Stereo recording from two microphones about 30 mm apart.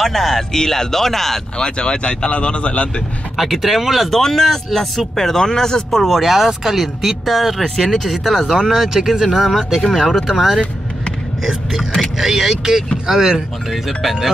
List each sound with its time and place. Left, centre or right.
0.0 s speech: centre
0.5 s speech: centre
1.6 s speech: left
3.3 s speech: centre
4.1 s speech: centre
5.5 s speech: centre
6.0 s speech: centre
7.6 s speech: centre
8.6 s speech: centre
9.9 s speech: centre
12.2 s speech: centre
13.0 s speech: right
13.7 s speech: centre